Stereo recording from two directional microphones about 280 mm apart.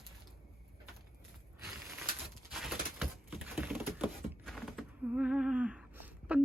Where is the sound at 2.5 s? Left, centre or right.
Centre.